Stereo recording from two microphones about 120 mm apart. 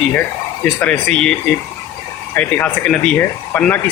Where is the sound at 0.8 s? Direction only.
10° left (ahead or behind).